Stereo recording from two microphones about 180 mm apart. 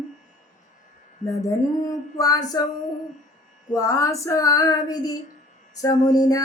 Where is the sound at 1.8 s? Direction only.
20° left (ahead or behind).